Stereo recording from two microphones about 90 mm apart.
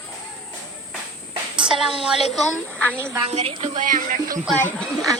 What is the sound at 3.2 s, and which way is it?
Speech, 90° right.